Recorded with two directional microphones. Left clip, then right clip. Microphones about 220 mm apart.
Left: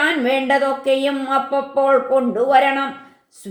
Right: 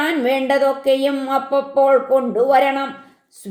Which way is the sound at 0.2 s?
30° right (ahead or behind).